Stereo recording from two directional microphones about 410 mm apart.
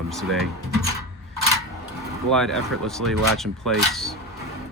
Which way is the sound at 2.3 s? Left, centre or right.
Centre.